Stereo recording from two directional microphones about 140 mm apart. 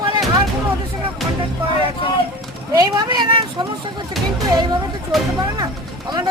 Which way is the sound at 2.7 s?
30° right (ahead or behind).